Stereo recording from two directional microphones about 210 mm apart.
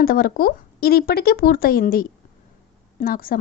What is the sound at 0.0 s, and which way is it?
Speech, 45° left (ahead or behind).